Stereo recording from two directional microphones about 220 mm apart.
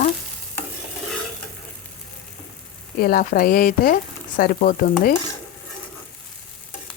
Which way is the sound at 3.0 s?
40° left (ahead or behind).